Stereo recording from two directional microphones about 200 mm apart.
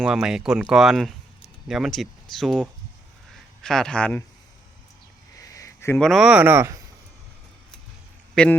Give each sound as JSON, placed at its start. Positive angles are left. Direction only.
{"t": 0.0, "sound": "speech", "side_deg": -5}
{"t": 5.4, "sound": "a sound", "side_deg": 15}
{"t": 6.0, "sound": "speech", "side_deg": 0}
{"t": 8.4, "sound": "speech", "side_deg": 5}